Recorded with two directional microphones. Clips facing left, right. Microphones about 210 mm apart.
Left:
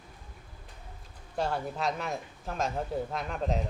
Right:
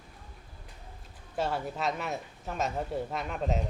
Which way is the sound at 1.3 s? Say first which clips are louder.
Even; centre (ahead or behind).